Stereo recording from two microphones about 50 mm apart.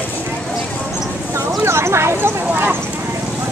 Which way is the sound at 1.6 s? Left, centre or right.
Right.